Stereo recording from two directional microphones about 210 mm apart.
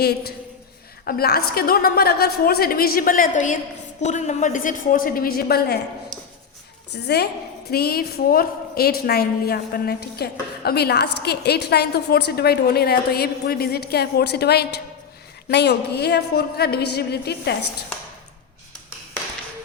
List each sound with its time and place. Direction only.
0.0 s a woman's voice: 50° left (ahead or behind)
6.9 s a woman's voice: 50° left (ahead or behind)